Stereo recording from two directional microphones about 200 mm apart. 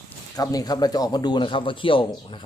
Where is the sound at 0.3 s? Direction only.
20° left (ahead or behind).